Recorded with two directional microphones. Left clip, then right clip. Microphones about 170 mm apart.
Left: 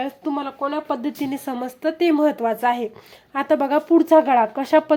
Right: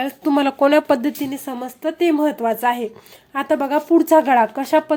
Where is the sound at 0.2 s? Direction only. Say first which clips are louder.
Right 9 dB; 40° right (ahead or behind).